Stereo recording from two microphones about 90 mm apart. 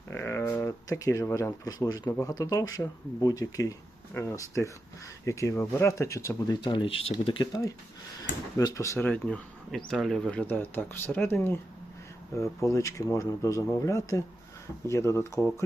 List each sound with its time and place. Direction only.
0.1 s a sound: 30° left (ahead or behind)
0.9 s speech: 40° left (ahead or behind)
6.6 s speech: 60° left (ahead or behind); by 7.4 s 85° left
8.5 s speech: 40° left (ahead or behind)
9.0 s speech: 15° left (ahead or behind); by 15.4 s 30° left (ahead or behind)